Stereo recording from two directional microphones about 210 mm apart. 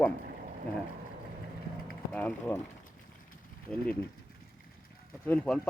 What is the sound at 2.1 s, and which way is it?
Speech, 5° left (ahead or behind).